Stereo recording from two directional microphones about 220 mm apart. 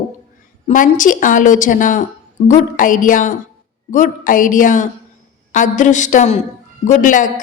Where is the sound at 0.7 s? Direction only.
35° left (ahead or behind).